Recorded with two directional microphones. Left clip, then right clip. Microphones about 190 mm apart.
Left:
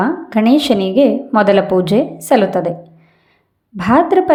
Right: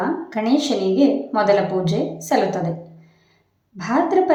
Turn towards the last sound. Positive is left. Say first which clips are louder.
# left 6 dB
turn(degrees=45)  # may be behind; listen again after turning